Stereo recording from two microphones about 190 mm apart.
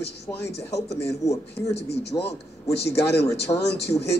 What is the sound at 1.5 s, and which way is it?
A woman's voice, 60° left (ahead or behind).